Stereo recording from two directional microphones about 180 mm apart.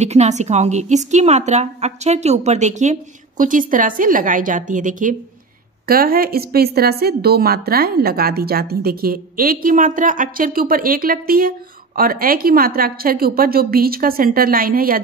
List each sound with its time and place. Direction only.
0.0 s a woman's voice: 40° right (ahead or behind)